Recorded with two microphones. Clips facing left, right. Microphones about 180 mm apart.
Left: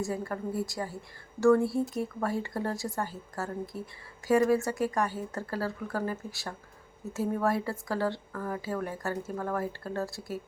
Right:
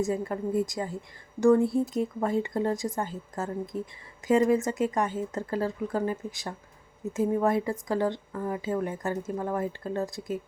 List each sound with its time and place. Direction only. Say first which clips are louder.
0.0 s speech: right 4 dB; 20° right (ahead or behind)